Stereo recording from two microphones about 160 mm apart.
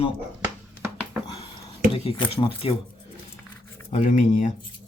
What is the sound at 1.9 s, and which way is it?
Speech, 35° left (ahead or behind).